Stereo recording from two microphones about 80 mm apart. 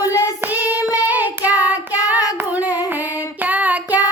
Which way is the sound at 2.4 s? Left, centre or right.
Right.